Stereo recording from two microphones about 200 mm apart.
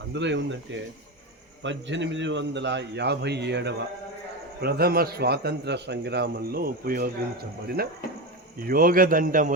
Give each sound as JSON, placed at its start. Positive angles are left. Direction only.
{"t": 0.1, "sound": "a man's voice", "side_deg": -60}